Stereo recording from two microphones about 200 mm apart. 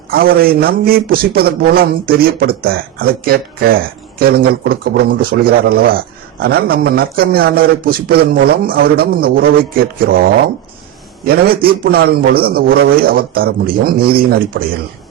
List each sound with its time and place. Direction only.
0.1 s a man's voice: 50° right (ahead or behind)